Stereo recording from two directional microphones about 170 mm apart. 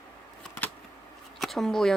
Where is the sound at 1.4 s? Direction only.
Centre (ahead or behind).